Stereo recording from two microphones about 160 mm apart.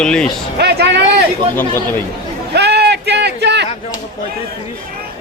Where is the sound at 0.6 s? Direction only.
90° right.